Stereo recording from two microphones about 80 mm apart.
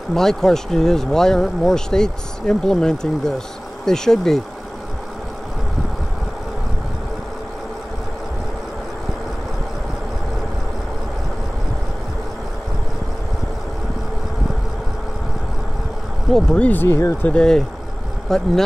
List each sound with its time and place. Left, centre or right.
0.1 s speech: centre
16.3 s speech: centre
16.6 s speech: left
17.3 s speech: centre